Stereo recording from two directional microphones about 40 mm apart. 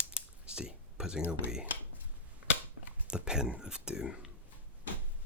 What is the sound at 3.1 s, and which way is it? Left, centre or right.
Speech, centre.